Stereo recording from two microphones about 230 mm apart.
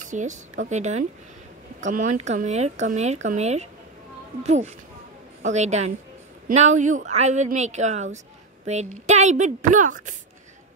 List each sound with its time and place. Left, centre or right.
0.0 s a woman's voice: right